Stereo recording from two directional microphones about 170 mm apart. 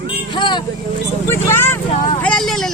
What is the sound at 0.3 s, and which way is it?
Vehicle, 25° left (ahead or behind).